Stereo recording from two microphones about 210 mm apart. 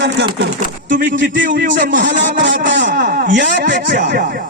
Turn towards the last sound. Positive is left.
turn(degrees=-55)  # may be behind; listen again after turning